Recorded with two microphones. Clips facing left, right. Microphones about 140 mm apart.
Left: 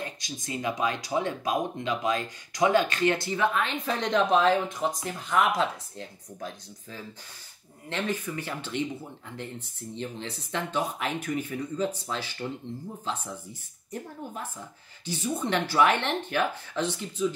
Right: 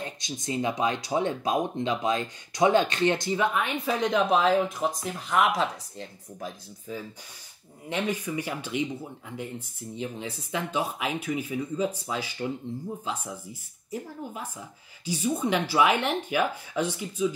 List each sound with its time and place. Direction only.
0.0 s speech: 25° right (ahead or behind); by 7.0 s centre (ahead or behind)
7.9 s speech: 15° right (ahead or behind)
9.9 s speech: 10° right (ahead or behind)